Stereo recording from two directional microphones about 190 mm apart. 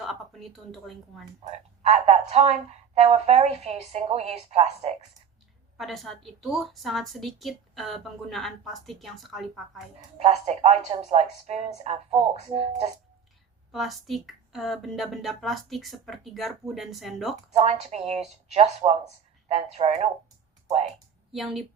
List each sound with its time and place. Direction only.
0.0 s a woman's voice: centre (ahead or behind)
1.5 s speech: 35° right (ahead or behind)
5.7 s a woman's voice: centre (ahead or behind)
10.2 s speech: 35° right (ahead or behind)
13.7 s a woman's voice: centre (ahead or behind)
17.5 s speech: 35° right (ahead or behind)
21.3 s a woman's voice: centre (ahead or behind)